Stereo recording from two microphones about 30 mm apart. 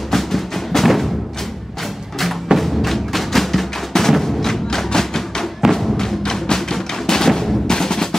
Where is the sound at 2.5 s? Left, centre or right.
Centre.